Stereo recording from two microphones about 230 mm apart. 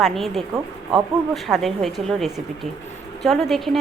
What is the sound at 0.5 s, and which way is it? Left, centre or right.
Speech, centre.